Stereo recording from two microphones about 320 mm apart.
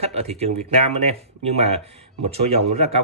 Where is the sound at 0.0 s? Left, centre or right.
Centre.